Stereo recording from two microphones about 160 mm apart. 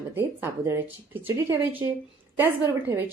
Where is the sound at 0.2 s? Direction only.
15° right (ahead or behind).